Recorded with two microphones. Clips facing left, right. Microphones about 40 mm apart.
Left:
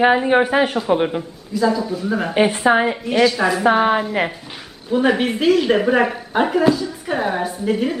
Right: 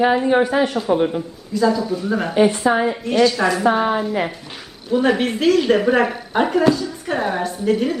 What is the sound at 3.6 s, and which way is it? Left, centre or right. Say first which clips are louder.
Speech: left 4 dB; left.